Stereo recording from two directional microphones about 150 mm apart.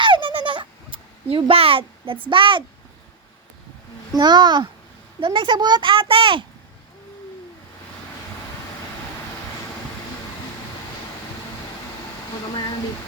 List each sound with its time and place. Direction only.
0.0 s a sound: 35° right (ahead or behind)
2.3 s a child's voice: 35° right (ahead or behind)
4.1 s a child's voice: 30° right (ahead or behind)